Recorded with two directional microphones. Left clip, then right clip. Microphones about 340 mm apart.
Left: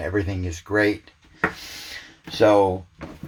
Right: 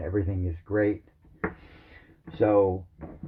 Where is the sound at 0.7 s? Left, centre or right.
Left.